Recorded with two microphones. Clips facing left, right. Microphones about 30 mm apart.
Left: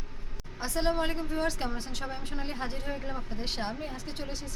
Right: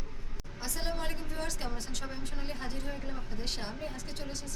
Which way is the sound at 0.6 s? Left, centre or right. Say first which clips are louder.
Left 8 dB; centre.